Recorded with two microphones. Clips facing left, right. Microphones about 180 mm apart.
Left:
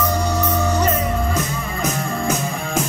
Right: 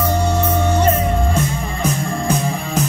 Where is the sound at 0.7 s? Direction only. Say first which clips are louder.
Right 3 dB; 30° right (ahead or behind).